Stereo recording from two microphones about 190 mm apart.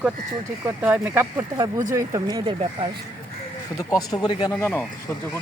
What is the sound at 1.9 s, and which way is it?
Speech, 20° right (ahead or behind).